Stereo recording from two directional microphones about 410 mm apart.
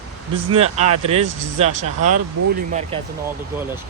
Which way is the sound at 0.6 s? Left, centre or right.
Centre.